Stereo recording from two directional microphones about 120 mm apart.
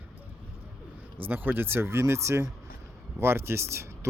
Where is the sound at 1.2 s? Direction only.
15° right (ahead or behind).